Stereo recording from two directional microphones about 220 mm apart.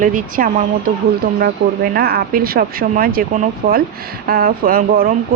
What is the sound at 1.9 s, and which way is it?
A woman's voice, 45° right (ahead or behind).